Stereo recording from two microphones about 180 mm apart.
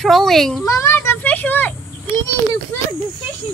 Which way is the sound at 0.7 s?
15° left (ahead or behind).